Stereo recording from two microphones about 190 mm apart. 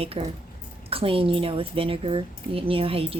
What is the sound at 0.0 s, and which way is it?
Speech, 30° right (ahead or behind).